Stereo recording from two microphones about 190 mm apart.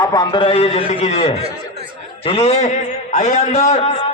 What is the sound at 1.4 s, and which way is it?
Speech, 30° right (ahead or behind).